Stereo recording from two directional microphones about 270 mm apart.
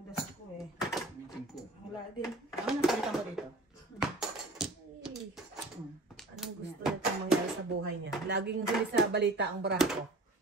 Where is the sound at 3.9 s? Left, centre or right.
Centre.